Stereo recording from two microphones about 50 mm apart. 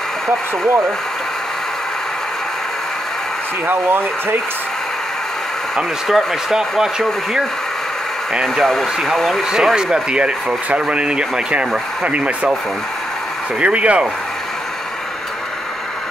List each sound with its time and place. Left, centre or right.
0.7 s speech: right
3.6 s speech: right
6.0 s speech: centre
8.6 s speech: centre
9.4 s speech: centre
13.6 s speech: right